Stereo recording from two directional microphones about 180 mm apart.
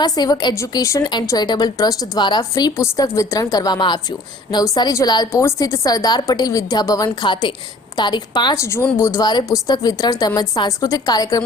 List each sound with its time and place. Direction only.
0.0 s a woman's voice: 20° left (ahead or behind)